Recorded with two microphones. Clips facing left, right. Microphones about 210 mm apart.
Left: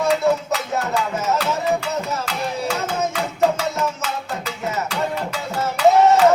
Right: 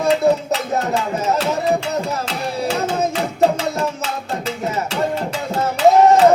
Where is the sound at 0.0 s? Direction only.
30° right (ahead or behind).